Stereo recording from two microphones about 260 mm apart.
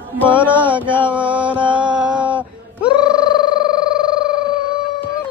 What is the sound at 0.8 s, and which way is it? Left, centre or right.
Mantra, centre.